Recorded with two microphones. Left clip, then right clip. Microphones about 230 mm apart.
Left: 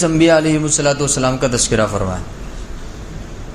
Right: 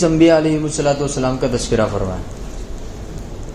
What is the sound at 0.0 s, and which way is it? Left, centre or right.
A man's voice, left.